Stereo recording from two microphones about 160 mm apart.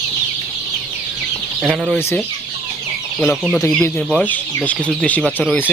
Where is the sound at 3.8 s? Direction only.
10° left (ahead or behind).